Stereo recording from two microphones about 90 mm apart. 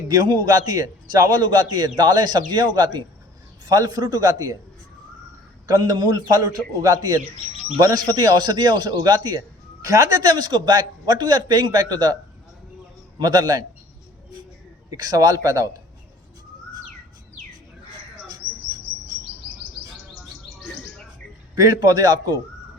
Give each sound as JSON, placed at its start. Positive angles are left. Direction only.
{"t": 0.1, "sound": "a man's voice", "side_deg": -45}
{"t": 5.6, "sound": "a man's voice", "side_deg": -45}
{"t": 13.1, "sound": "a man's voice", "side_deg": -45}
{"t": 14.8, "sound": "speech", "side_deg": -40}
{"t": 21.5, "sound": "a man's voice", "side_deg": -40}